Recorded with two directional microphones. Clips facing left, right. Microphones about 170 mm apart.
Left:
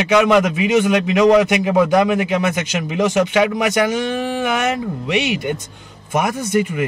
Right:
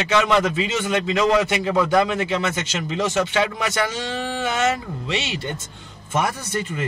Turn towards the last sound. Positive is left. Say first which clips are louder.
# left 8 dB
turn(degrees=15)  # may be behind; listen again after turning